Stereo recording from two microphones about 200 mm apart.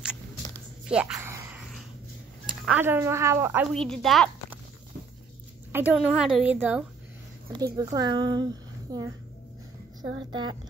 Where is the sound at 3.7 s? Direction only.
Centre (ahead or behind).